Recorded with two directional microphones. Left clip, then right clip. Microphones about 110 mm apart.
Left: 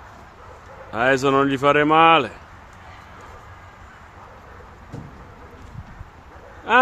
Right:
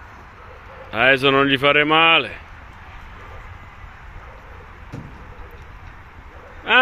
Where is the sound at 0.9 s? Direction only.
10° left (ahead or behind).